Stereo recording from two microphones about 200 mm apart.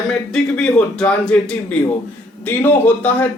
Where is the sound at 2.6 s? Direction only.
10° left (ahead or behind).